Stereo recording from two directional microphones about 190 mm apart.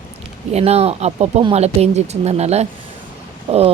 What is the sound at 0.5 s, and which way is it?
Speech, 35° right (ahead or behind).